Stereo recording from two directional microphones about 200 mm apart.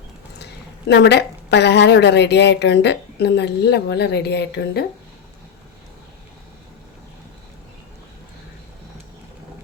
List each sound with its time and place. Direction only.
0.9 s a woman's voice: 60° left (ahead or behind)